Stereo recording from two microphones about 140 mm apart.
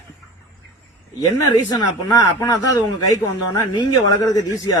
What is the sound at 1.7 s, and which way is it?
Speech, 25° left (ahead or behind).